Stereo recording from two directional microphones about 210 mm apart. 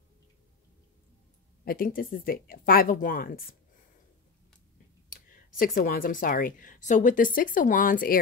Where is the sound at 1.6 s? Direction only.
45° left (ahead or behind).